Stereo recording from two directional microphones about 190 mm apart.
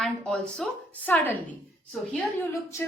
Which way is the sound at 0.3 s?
5° left (ahead or behind).